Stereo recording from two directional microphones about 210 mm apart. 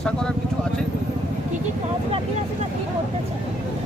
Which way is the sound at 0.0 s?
5° left (ahead or behind).